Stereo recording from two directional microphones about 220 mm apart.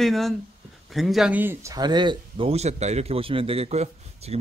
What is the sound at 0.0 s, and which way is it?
Speech, centre (ahead or behind).